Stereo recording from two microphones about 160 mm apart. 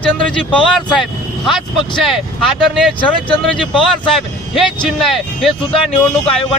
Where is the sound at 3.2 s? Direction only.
30° left (ahead or behind).